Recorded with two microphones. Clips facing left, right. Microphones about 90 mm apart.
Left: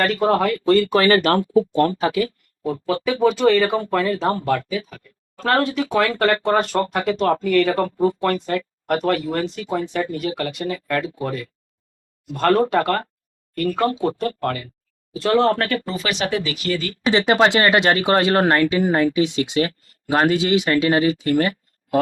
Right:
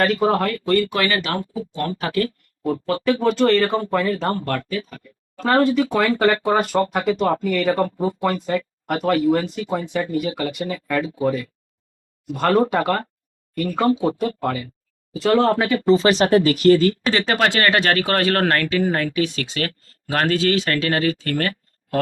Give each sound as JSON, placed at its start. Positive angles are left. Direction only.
{"t": 0.0, "sound": "speech", "side_deg": 0}
{"t": 0.7, "sound": "speech", "side_deg": 35}
{"t": 1.3, "sound": "speech", "side_deg": 50}
{"t": 2.1, "sound": "speech", "side_deg": 10}
{"t": 15.9, "sound": "speech", "side_deg": -35}
{"t": 17.1, "sound": "speech", "side_deg": 20}